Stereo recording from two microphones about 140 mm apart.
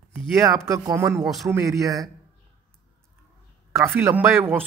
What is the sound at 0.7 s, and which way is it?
Speech, 20° right (ahead or behind).